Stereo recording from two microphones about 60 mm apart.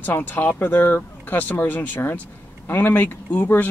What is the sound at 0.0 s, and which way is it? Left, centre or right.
Speech, left.